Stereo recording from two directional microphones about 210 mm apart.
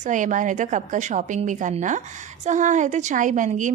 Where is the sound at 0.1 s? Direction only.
35° right (ahead or behind).